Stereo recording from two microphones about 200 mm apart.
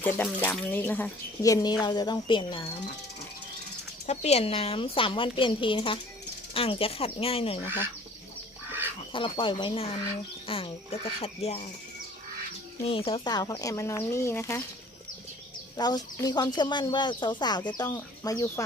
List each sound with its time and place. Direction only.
0.0 s speech: 10° left (ahead or behind); by 2.9 s 25° left (ahead or behind)
4.0 s speech: 35° left (ahead or behind)
9.1 s speech: 25° left (ahead or behind)
12.8 s speech: 30° left (ahead or behind); by 14.6 s 15° left (ahead or behind)
15.8 s speech: 20° left (ahead or behind)